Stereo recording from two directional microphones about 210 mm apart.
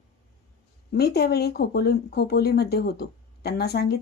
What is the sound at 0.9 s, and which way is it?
Speech, 50° left (ahead or behind).